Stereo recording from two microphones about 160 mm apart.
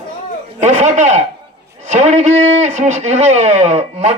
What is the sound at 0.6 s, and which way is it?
Speech, 45° right (ahead or behind).